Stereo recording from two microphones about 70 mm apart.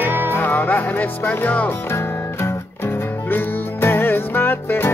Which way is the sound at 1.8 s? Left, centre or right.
Left.